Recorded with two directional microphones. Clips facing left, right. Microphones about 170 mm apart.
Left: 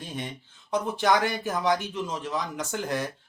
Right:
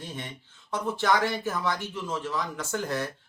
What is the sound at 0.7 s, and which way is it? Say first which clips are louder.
Speech: left 2 dB; 15° left (ahead or behind).